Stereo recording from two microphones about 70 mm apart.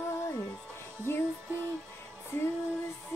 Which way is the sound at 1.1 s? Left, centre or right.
Left.